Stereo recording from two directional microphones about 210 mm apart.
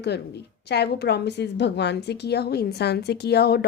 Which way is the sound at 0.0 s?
50° left (ahead or behind).